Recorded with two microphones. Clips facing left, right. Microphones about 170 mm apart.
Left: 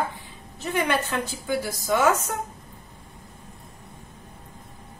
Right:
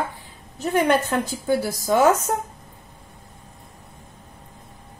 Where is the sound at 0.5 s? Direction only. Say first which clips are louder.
Right 5 dB; 40° right (ahead or behind).